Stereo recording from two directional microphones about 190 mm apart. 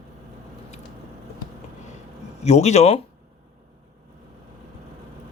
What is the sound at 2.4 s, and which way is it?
Speech, 35° left (ahead or behind).